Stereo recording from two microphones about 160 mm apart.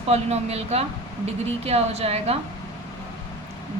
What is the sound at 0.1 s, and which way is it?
Speech, 40° right (ahead or behind).